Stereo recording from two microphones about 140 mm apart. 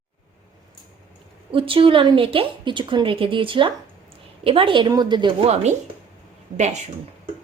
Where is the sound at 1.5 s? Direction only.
40° right (ahead or behind).